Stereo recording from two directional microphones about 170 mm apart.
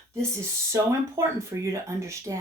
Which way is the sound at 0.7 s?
15° right (ahead or behind).